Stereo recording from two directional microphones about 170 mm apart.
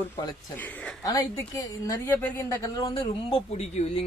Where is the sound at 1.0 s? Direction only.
20° left (ahead or behind).